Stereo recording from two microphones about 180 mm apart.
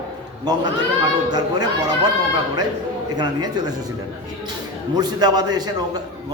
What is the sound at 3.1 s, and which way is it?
Speech, 20° right (ahead or behind).